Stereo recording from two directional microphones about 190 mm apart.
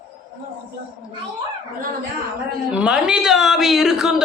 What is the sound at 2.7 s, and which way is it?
Speech, 5° right (ahead or behind).